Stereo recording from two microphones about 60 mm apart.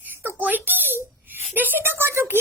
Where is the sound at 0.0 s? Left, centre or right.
Right.